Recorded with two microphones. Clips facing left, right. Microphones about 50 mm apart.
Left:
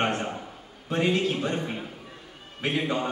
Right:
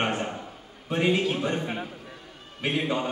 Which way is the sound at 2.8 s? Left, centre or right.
Centre.